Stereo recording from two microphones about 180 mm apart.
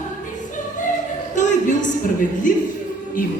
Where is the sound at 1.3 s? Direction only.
45° left (ahead or behind).